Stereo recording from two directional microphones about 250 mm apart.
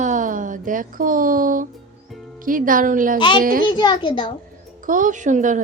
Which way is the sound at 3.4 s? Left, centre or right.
Right.